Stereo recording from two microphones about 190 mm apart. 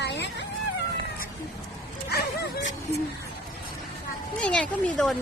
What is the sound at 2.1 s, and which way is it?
Dog, 55° left (ahead or behind).